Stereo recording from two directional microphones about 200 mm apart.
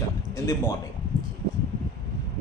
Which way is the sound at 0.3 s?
15° left (ahead or behind).